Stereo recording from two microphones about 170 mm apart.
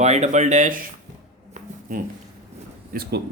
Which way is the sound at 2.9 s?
65° right (ahead or behind).